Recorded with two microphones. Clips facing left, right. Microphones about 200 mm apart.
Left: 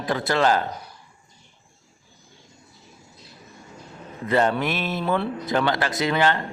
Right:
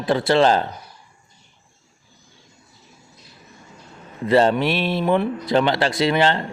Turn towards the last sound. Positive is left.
turn(degrees=-25)  # may be behind; listen again after turning